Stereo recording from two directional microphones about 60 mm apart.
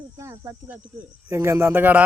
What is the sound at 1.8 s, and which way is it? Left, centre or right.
Speech, right.